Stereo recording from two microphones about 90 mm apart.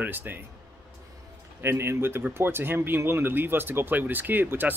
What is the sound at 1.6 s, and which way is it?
Speech, 30° right (ahead or behind).